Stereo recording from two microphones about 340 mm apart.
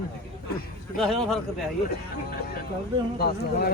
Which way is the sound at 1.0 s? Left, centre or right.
Centre.